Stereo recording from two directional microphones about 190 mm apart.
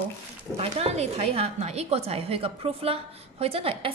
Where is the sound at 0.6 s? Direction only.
35° right (ahead or behind).